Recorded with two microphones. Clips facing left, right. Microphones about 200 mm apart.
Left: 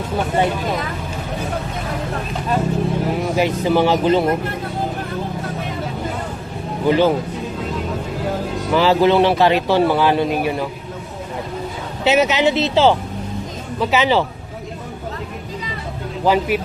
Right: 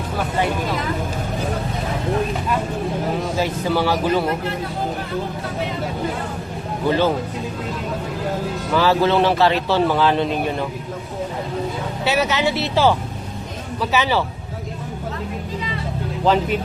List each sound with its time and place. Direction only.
3.3 s speech: 15° left (ahead or behind)
6.8 s a man's voice: 15° left (ahead or behind)
8.7 s a man's voice: 15° left (ahead or behind)
12.0 s a man's voice: 20° left (ahead or behind)
16.2 s a man's voice: 10° left (ahead or behind)